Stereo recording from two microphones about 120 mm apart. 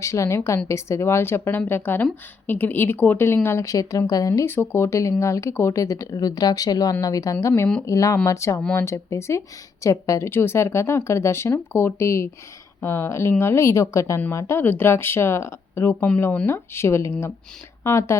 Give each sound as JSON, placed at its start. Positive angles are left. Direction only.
{"t": 0.0, "sound": "speech", "side_deg": 25}